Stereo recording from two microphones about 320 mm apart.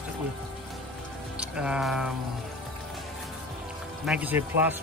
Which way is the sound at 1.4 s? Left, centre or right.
Centre.